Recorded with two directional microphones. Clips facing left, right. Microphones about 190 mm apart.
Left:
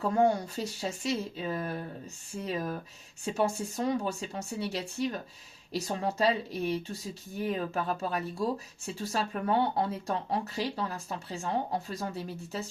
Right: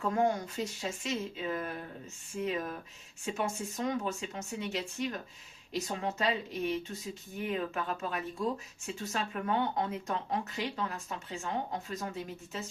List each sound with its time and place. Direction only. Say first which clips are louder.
0.1 s speech: left 4 dB; 30° left (ahead or behind)